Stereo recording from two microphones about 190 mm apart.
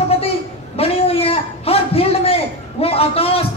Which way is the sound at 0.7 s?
30° left (ahead or behind).